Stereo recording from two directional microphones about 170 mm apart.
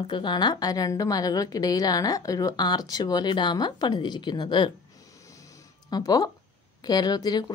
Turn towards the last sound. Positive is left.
turn(degrees=25)  # may be behind; listen again after turning